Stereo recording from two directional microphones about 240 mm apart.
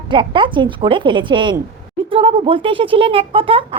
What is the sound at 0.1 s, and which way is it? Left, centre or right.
Speech, centre.